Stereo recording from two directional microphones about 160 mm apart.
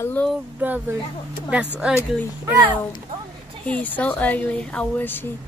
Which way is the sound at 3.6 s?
10° left (ahead or behind).